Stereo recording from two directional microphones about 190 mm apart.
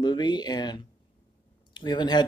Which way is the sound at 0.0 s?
20° left (ahead or behind).